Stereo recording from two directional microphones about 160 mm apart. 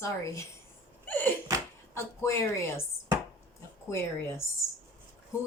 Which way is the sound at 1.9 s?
15° left (ahead or behind).